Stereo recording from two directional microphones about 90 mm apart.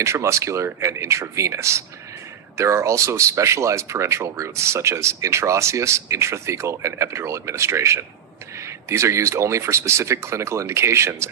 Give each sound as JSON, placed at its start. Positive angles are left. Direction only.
{"t": 0.0, "sound": "speech", "side_deg": -35}